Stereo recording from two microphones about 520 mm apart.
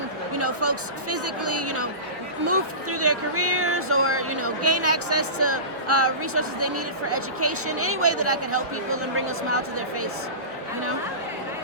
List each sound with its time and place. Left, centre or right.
0.3 s speech: right